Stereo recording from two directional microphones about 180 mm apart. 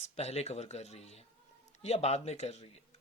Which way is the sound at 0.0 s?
35° left (ahead or behind).